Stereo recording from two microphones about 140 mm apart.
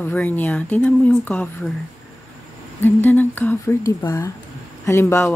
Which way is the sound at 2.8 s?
15° left (ahead or behind).